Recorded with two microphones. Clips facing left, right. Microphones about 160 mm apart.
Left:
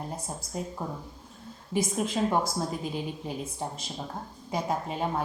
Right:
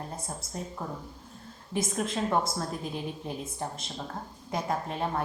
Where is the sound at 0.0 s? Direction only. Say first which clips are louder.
Left 2 dB; 10° left (ahead or behind).